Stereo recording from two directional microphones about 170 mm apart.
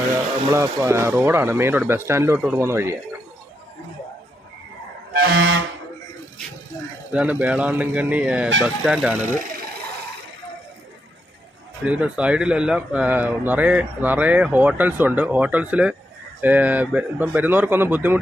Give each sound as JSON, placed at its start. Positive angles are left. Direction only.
{"t": 0.5, "sound": "speech", "side_deg": -15}
{"t": 5.1, "sound": "vehicle", "side_deg": -65}
{"t": 7.1, "sound": "speech", "side_deg": -10}
{"t": 11.9, "sound": "speech", "side_deg": -5}